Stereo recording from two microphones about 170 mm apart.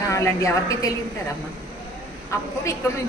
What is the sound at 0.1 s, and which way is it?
Speech, 20° left (ahead or behind).